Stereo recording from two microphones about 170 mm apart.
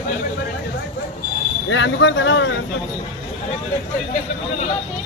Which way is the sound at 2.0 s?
90° left.